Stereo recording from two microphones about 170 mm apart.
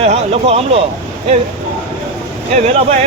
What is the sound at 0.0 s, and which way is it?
Speech, 40° right (ahead or behind).